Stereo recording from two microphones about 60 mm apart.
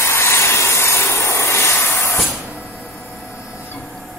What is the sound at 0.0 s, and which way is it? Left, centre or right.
Vehicle, left.